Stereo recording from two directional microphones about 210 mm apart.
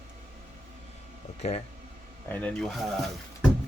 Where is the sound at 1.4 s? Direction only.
30° left (ahead or behind).